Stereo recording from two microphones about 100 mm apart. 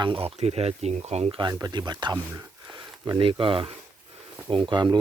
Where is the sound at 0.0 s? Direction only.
70° right (ahead or behind); by 1.4 s 90° right.